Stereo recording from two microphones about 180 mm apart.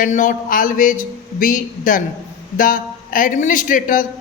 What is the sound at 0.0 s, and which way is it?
A man's voice, 45° left (ahead or behind).